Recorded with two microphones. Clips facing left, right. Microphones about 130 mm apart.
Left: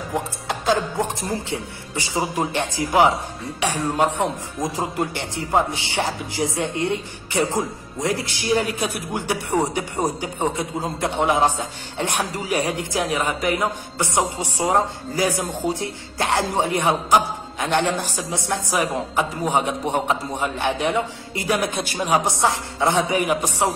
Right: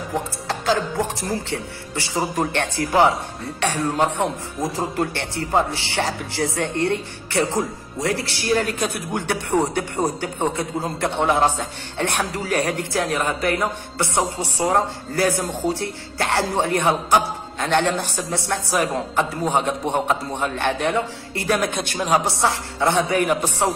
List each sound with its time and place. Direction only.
0.1 s a man's voice: 20° left (ahead or behind)
8.8 s a man's voice: 5° left (ahead or behind)
21.7 s a man's voice: 5° left (ahead or behind)
22.4 s a man's voice: 20° left (ahead or behind)